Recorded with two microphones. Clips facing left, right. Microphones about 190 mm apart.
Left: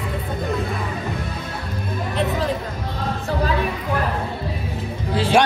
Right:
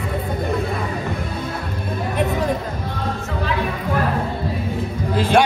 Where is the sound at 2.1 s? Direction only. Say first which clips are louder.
Right 1 dB; 15° right (ahead or behind).